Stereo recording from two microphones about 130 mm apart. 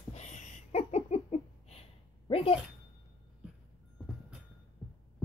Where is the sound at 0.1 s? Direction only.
65° left (ahead or behind); by 2.5 s 45° left (ahead or behind).